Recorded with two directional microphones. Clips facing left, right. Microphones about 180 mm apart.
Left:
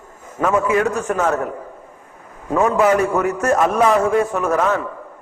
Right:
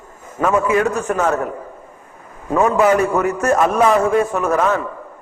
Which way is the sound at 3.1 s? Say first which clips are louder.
Right 1 dB; 25° right (ahead or behind).